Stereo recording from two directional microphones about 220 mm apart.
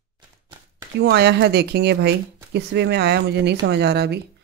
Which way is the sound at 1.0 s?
50° right (ahead or behind).